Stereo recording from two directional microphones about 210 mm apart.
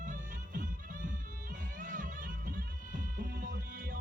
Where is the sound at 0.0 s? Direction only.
40° right (ahead or behind).